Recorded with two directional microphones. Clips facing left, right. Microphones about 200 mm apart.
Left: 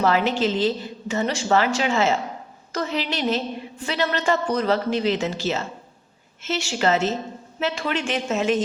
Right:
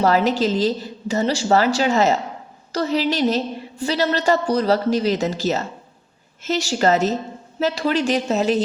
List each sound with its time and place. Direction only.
0.0 s a woman's voice: 40° right (ahead or behind)